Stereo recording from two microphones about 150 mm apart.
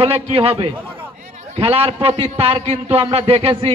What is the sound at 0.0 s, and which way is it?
A man's voice, 40° right (ahead or behind).